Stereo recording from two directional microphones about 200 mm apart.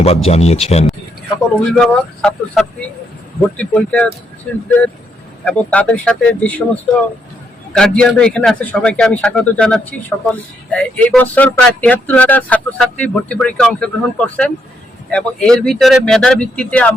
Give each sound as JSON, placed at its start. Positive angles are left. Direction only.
{"t": 0.0, "sound": "speech", "side_deg": 30}
{"t": 1.8, "sound": "speech", "side_deg": 5}